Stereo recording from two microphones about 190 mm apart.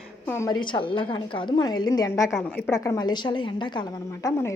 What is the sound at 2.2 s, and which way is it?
Speech, centre (ahead or behind).